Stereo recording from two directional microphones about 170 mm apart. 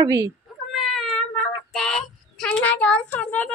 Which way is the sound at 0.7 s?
Centre (ahead or behind).